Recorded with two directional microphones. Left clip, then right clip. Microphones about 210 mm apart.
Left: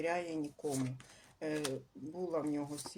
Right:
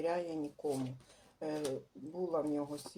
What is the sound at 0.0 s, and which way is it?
Speech, 20° left (ahead or behind).